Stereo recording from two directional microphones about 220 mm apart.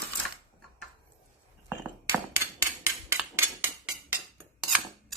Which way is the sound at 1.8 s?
10° right (ahead or behind).